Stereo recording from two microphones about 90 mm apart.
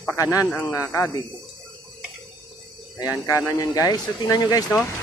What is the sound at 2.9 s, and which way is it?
Speech, 45° left (ahead or behind).